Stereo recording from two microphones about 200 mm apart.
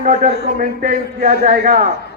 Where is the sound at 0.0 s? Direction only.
40° right (ahead or behind).